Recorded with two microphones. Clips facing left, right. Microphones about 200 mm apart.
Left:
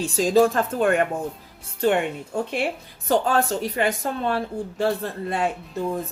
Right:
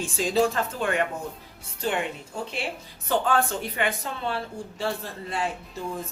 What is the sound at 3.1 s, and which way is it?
Speech, 40° left (ahead or behind).